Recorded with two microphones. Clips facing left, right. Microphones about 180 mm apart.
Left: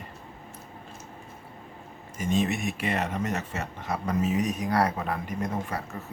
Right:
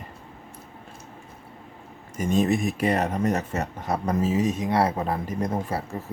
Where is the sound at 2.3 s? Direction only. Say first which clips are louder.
Right 4 dB; 40° right (ahead or behind).